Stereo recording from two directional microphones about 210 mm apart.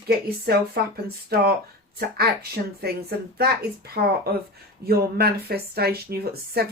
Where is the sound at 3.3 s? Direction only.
45° right (ahead or behind).